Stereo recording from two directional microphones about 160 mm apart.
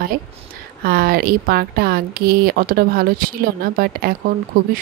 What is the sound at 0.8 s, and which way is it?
Speech, 65° right (ahead or behind).